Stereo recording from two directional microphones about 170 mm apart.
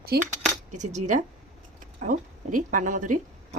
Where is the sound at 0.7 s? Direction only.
45° right (ahead or behind).